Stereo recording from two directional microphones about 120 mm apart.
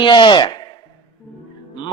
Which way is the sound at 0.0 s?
40° left (ahead or behind).